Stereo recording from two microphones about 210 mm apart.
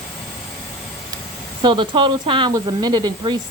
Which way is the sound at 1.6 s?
25° right (ahead or behind).